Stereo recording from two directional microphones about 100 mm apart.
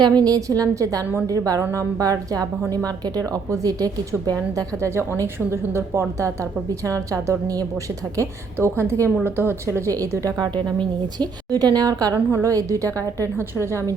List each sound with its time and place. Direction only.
0.0 s a woman's voice: 40° right (ahead or behind)